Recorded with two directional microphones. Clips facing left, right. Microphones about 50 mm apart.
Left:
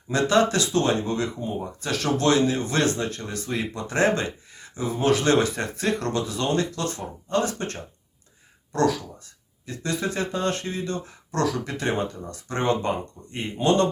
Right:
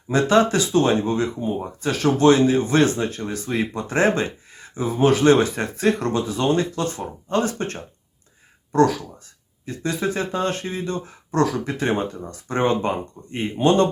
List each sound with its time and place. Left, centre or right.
0.1 s speech: right
5.8 s speech: centre
6.1 s speech: right
9.6 s speech: right